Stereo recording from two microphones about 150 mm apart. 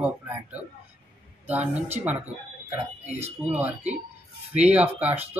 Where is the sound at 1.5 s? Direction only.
10° right (ahead or behind).